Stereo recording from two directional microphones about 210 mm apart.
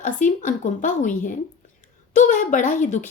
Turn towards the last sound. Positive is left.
turn(degrees=35)  # may be behind; listen again after turning